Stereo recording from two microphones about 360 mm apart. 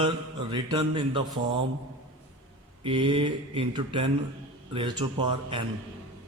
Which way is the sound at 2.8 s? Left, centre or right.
Centre.